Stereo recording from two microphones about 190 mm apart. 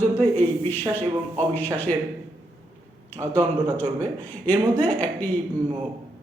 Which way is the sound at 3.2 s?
15° right (ahead or behind).